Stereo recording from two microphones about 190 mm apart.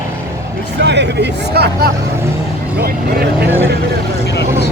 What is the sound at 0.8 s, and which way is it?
Hubbub, 65° right (ahead or behind).